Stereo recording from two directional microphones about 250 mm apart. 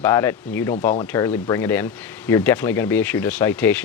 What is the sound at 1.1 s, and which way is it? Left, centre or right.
Speech, centre.